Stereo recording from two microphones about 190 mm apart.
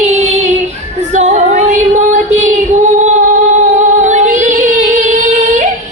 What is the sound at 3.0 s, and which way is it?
Music, 40° right (ahead or behind).